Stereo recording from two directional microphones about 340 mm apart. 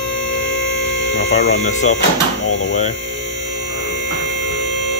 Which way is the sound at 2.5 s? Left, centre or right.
Left.